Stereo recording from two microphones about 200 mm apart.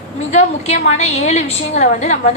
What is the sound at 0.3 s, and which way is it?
A woman's voice, 35° left (ahead or behind).